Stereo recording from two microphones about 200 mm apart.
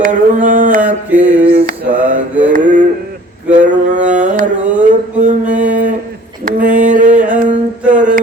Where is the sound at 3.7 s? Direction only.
40° right (ahead or behind).